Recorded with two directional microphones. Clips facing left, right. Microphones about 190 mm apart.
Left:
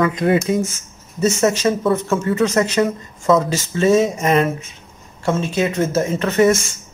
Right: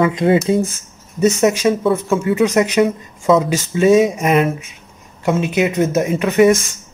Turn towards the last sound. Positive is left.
turn(degrees=-15)  # may be behind; listen again after turning